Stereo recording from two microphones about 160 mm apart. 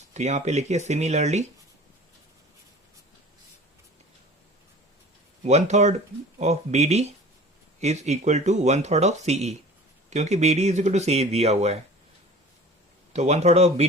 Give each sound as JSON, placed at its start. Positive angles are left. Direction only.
{"t": 0.1, "sound": "speech", "side_deg": -45}
{"t": 5.5, "sound": "speech", "side_deg": -45}
{"t": 13.1, "sound": "speech", "side_deg": -45}